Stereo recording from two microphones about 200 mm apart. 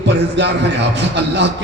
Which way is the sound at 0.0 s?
60° right (ahead or behind).